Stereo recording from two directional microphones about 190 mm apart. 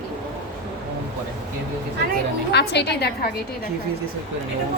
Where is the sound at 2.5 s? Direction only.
60° left (ahead or behind).